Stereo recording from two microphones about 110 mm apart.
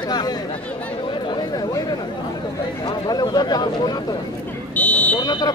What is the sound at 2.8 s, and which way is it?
Speech, 40° left (ahead or behind).